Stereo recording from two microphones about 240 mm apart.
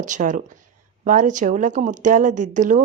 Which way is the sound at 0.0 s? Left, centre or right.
Right.